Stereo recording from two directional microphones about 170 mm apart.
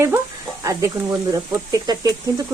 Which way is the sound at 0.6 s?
20° right (ahead or behind).